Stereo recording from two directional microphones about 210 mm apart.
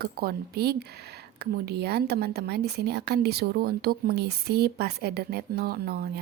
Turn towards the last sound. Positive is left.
turn(degrees=-50)  # may be behind; listen again after turning